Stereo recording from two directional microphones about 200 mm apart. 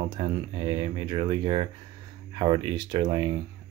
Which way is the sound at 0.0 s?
25° right (ahead or behind).